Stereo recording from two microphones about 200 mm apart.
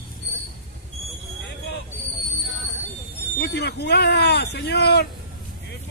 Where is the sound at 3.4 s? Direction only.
55° left (ahead or behind).